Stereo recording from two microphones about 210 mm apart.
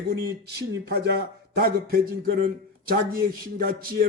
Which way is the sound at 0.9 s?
50° right (ahead or behind).